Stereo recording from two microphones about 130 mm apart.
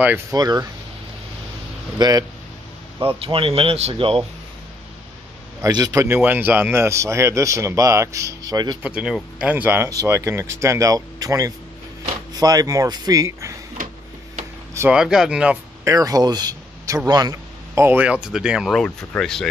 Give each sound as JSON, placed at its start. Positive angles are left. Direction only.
{"t": 0.3, "sound": "a man's voice", "side_deg": -30}
{"t": 2.0, "sound": "speech", "side_deg": -30}
{"t": 3.2, "sound": "speech", "side_deg": -45}
{"t": 5.6, "sound": "a man's voice", "side_deg": -30}
{"t": 8.8, "sound": "a man's voice", "side_deg": -5}
{"t": 14.9, "sound": "speech", "side_deg": -5}
{"t": 15.8, "sound": "speech", "side_deg": -25}
{"t": 17.1, "sound": "a sound", "side_deg": -30}
{"t": 17.8, "sound": "speech", "side_deg": -10}